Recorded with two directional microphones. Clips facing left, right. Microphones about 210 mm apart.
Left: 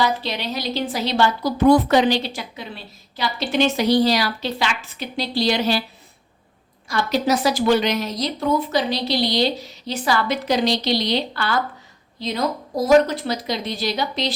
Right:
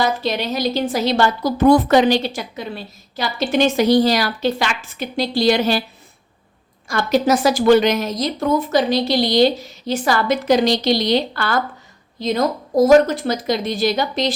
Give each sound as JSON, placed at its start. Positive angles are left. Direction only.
{"t": 0.0, "sound": "a woman's voice", "side_deg": -45}
{"t": 6.8, "sound": "a woman's voice", "side_deg": -50}